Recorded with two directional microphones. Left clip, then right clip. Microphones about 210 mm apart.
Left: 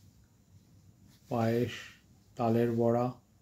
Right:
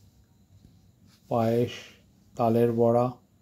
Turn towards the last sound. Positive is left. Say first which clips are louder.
# right 7 dB
turn(degrees=-10)  # may be behind; listen again after turning